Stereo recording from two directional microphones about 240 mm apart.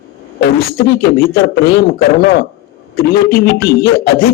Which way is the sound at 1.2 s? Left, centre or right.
Left.